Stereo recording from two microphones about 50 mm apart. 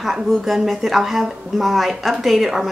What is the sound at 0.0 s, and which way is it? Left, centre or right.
A woman's voice, centre.